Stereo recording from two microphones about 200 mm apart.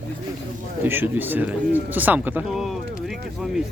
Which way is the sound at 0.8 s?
10° right (ahead or behind).